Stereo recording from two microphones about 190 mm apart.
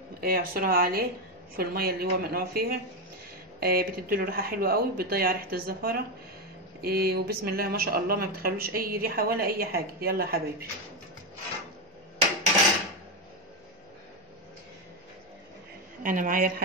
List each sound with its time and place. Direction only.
0.2 s speech: 50° right (ahead or behind)
16.0 s speech: 45° right (ahead or behind)